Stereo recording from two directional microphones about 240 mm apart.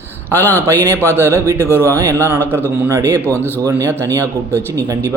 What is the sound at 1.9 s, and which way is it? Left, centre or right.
Speech, centre.